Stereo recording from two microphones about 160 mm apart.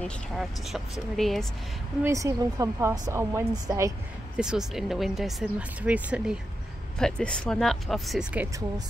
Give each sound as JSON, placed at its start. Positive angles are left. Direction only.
{"t": 0.0, "sound": "speech", "side_deg": 0}
{"t": 2.0, "sound": "a woman's voice", "side_deg": -20}
{"t": 4.4, "sound": "speech", "side_deg": -5}
{"t": 7.0, "sound": "speech", "side_deg": 5}